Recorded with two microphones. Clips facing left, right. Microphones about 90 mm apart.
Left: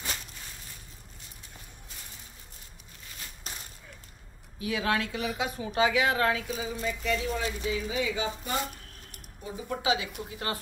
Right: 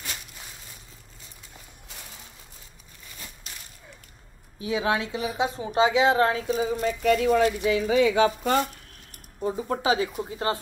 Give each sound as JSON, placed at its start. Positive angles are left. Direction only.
{"t": 3.4, "sound": "a sound", "side_deg": 40}
{"t": 4.6, "sound": "a woman's voice", "side_deg": -25}
{"t": 9.4, "sound": "a woman's voice", "side_deg": -45}